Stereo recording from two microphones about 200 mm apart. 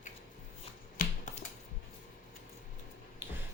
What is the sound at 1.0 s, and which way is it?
Finger snapping, 45° left (ahead or behind).